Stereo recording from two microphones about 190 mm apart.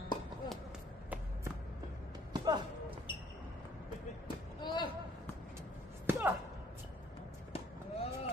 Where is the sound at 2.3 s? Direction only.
20° right (ahead or behind).